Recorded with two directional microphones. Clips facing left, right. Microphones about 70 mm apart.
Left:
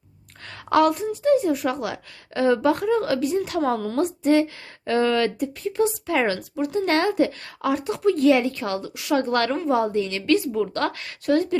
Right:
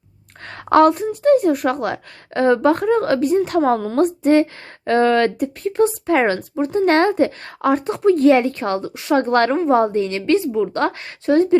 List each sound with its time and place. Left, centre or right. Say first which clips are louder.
0.4 s a woman's voice: right 6 dB; right